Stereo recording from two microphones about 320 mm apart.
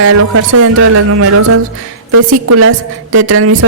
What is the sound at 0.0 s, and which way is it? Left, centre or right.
Speech, right.